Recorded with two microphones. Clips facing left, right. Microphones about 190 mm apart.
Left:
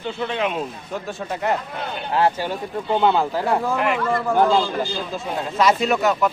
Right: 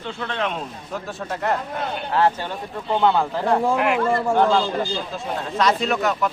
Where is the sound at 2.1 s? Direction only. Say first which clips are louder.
Left 1 dB; 15° left (ahead or behind); by 4.0 s 5° right (ahead or behind).